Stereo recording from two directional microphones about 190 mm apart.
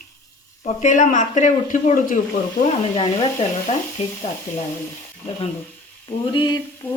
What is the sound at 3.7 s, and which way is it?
Speech, 35° left (ahead or behind).